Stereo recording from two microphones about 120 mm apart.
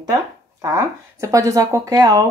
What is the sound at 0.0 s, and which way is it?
Speech, 30° right (ahead or behind).